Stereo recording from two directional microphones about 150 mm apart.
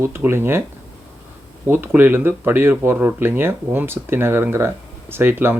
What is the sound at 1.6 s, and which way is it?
Speech, 15° right (ahead or behind).